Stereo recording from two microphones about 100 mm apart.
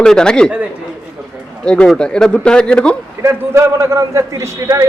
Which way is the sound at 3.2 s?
30° right (ahead or behind).